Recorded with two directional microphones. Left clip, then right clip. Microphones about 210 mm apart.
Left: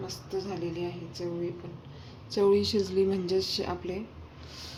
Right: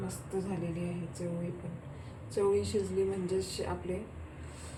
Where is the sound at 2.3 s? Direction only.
45° left (ahead or behind).